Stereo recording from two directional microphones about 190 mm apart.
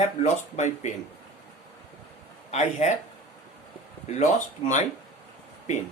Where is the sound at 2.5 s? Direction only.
35° left (ahead or behind).